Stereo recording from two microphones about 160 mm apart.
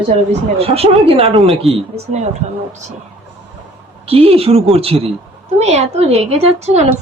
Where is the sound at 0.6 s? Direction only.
40° right (ahead or behind).